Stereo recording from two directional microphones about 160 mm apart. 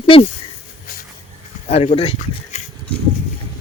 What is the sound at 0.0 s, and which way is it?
Speech, 35° left (ahead or behind).